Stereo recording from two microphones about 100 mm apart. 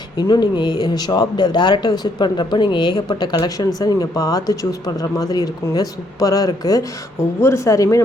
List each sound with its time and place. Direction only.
0.2 s speech: 45° left (ahead or behind)
7.2 s speech: 25° left (ahead or behind)